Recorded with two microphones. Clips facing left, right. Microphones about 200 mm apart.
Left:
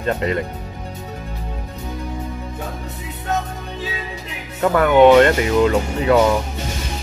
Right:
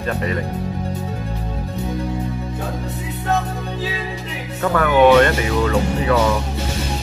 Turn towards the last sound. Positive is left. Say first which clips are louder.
# left 1 dB
turn(degrees=20)  # may be behind; listen again after turning